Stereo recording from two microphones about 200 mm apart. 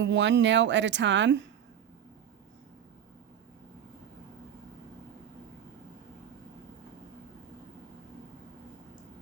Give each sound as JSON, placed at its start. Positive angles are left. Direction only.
{"t": 0.0, "sound": "a woman's voice", "side_deg": -65}